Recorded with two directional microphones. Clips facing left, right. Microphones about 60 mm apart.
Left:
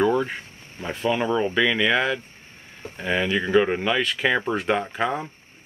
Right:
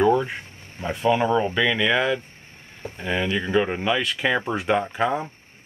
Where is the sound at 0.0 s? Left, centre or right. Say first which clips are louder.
Right 2 dB; centre.